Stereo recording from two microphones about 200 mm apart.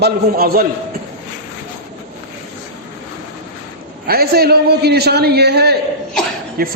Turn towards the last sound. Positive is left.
turn(degrees=-50)  # may be behind; listen again after turning